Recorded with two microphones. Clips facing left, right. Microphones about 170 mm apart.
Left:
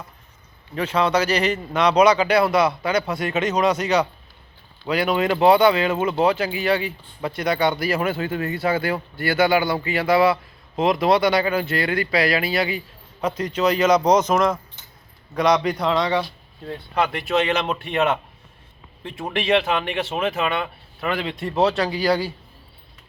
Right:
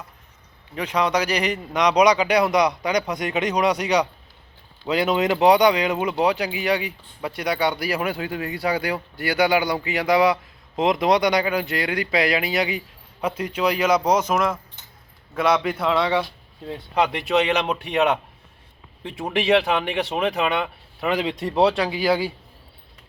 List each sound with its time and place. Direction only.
0.8 s speech: 15° right (ahead or behind)
16.6 s speech: 20° right (ahead or behind)